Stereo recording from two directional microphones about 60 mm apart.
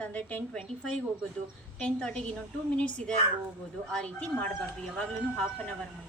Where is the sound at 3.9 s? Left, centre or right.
Centre.